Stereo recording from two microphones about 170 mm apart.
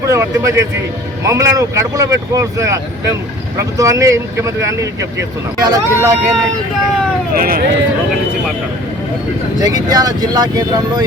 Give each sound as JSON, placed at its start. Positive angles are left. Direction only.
{"t": 0.1, "sound": "speech", "side_deg": -20}
{"t": 7.3, "sound": "speech", "side_deg": -60}
{"t": 9.6, "sound": "speech", "side_deg": -20}